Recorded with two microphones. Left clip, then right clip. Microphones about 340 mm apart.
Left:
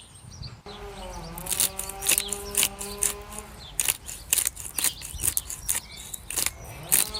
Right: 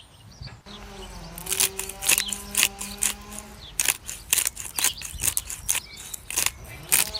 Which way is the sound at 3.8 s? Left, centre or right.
Centre.